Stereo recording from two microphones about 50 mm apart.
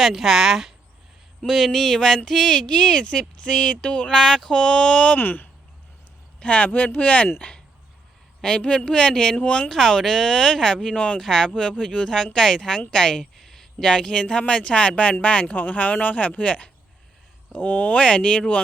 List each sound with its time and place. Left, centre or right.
0.0 s speech: centre
5.1 s speech: left